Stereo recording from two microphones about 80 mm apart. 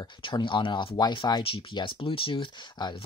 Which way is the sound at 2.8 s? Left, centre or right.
Left.